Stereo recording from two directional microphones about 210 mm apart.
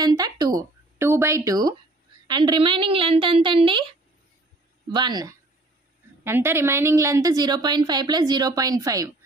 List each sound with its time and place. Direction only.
0.0 s a woman's voice: 20° right (ahead or behind)
4.8 s a woman's voice: 20° right (ahead or behind)